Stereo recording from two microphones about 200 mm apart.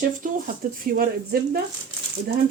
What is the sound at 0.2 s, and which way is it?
Speech, 45° right (ahead or behind).